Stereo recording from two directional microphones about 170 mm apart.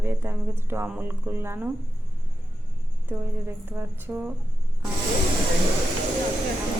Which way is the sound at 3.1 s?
10° right (ahead or behind).